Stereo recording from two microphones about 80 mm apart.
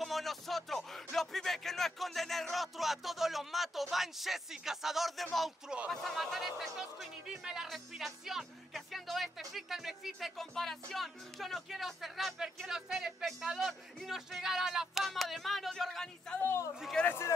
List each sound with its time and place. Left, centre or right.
0.0 s a man's voice: centre